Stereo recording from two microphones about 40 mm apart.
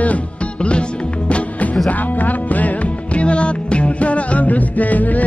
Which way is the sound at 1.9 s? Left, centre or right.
Left.